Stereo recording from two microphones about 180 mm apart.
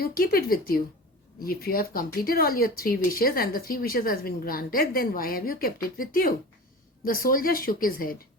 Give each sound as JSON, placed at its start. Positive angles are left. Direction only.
{"t": 0.0, "sound": "a woman's voice", "side_deg": 55}